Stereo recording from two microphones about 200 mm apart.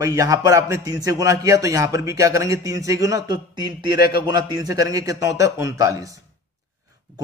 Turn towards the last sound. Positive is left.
turn(degrees=-15)  # may be behind; listen again after turning